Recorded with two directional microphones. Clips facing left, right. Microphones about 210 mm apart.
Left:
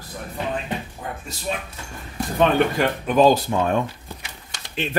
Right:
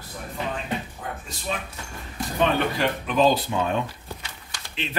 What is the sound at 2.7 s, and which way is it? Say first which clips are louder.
Speech: left 4 dB; 45° left (ahead or behind).